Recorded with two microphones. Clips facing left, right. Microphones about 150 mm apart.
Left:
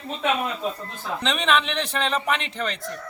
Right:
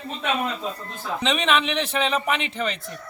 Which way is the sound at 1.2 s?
Centre (ahead or behind).